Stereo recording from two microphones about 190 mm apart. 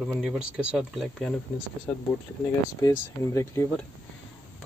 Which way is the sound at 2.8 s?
15° left (ahead or behind).